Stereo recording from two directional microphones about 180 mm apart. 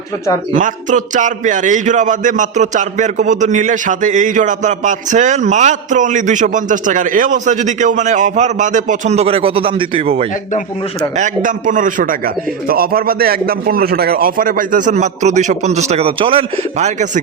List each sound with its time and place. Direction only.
0.5 s speech: 45° right (ahead or behind)
11.2 s speech: 45° right (ahead or behind)